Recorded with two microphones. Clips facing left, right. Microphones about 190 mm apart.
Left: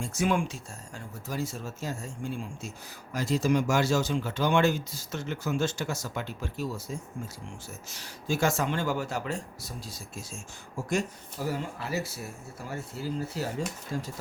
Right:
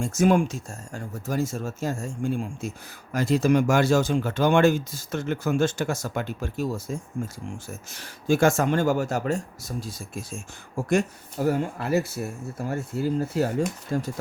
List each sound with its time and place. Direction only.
0.0 s speech: 45° right (ahead or behind)